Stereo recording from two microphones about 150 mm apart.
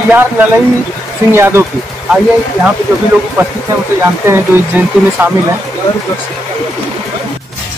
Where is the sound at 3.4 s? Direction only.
15° right (ahead or behind).